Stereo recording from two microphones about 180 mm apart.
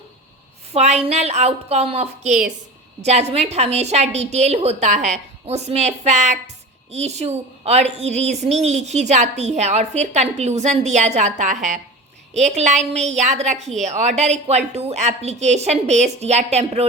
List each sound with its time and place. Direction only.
0.7 s a woman's voice: 35° right (ahead or behind)